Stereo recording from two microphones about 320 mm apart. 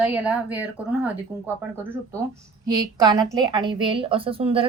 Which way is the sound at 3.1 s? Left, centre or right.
Centre.